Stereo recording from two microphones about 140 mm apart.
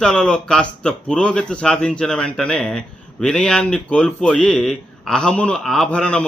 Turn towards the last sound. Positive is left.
turn(degrees=5)  # may be behind; listen again after turning